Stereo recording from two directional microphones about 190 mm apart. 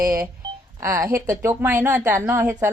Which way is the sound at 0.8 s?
15° right (ahead or behind).